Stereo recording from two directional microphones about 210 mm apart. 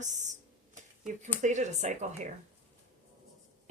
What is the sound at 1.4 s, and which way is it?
Speech, 35° right (ahead or behind).